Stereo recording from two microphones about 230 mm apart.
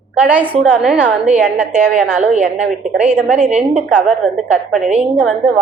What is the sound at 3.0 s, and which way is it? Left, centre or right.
A woman's voice, right.